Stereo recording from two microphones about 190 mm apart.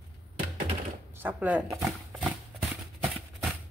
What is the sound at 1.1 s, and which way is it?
Speech, 10° right (ahead or behind).